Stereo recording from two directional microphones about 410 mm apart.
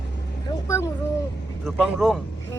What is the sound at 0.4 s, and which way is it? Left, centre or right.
Vehicle, centre.